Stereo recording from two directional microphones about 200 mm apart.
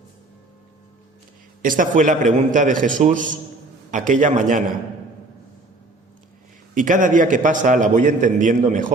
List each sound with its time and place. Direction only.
1.6 s a man's voice: 40° right (ahead or behind)
6.7 s a man's voice: 40° right (ahead or behind)